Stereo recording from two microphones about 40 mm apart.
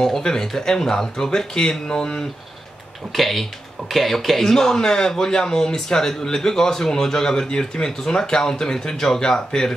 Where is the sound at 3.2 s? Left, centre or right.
Centre.